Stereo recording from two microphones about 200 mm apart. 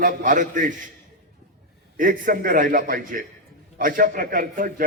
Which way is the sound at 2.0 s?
45° right (ahead or behind).